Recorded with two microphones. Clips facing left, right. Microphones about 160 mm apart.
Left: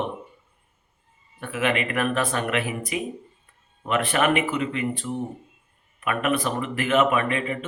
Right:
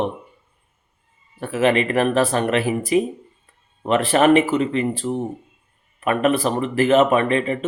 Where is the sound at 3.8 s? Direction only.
30° right (ahead or behind).